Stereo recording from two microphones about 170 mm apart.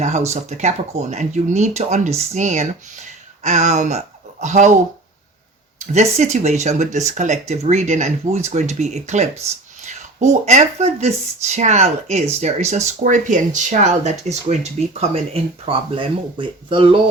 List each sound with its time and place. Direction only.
0.0 s speech: 40° right (ahead or behind)
5.8 s speech: 40° right (ahead or behind)